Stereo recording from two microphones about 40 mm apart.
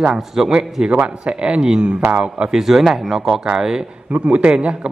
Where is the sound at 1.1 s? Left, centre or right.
Right.